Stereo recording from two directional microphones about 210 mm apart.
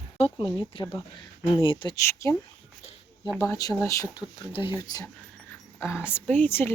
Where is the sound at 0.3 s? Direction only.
25° left (ahead or behind).